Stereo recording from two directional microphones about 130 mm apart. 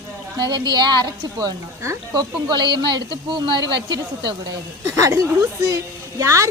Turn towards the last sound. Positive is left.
turn(degrees=-25)  # may be behind; listen again after turning